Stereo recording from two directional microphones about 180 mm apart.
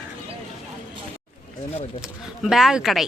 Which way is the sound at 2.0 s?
Centre (ahead or behind).